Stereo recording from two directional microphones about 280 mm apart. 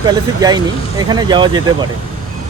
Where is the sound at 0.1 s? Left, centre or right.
Centre.